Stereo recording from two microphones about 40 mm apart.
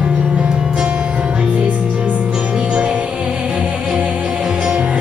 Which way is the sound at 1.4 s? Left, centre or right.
Right.